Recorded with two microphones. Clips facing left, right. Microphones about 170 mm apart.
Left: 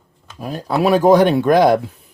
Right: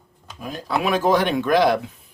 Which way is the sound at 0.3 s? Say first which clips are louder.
Left 5 dB; 40° left (ahead or behind).